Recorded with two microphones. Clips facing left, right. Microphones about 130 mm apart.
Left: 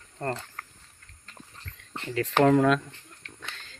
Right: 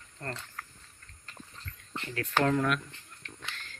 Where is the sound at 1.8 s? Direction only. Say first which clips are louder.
Left 7 dB; 85° left.